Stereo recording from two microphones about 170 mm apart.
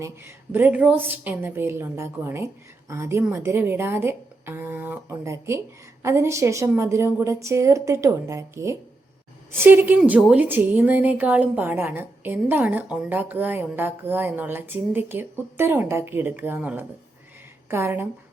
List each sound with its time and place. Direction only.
0.0 s a woman's voice: 15° right (ahead or behind)